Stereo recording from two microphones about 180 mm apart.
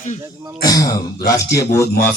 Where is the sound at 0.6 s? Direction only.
20° left (ahead or behind).